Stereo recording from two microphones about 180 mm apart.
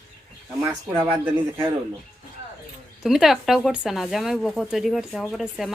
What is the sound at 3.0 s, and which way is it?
Speech, centre (ahead or behind).